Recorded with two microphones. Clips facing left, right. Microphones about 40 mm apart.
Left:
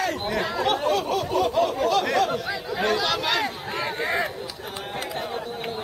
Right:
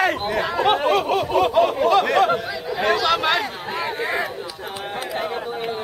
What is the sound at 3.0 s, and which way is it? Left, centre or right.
Chatter, right.